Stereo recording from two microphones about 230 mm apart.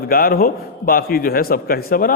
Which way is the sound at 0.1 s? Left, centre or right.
Left.